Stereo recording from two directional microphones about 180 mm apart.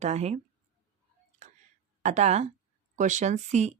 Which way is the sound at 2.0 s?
40° right (ahead or behind).